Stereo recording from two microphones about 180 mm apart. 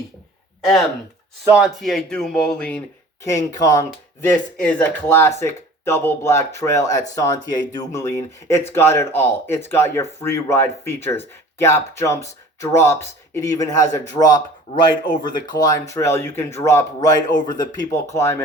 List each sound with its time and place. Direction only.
0.6 s speech: centre (ahead or behind)
3.2 s speech: 20° left (ahead or behind)
4.5 s speech: 5° left (ahead or behind)